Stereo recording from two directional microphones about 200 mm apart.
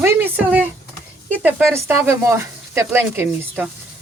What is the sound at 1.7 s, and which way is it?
Speech, 10° right (ahead or behind).